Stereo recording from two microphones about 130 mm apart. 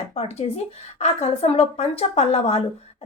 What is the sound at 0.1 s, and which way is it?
A woman's voice, 55° left (ahead or behind).